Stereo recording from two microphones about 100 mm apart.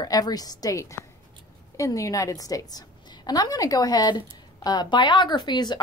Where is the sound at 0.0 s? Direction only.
40° left (ahead or behind).